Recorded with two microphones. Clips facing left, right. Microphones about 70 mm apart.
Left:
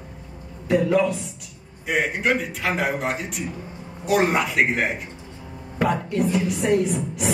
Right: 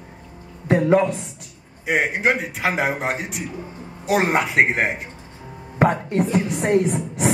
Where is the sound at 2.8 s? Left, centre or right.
Right.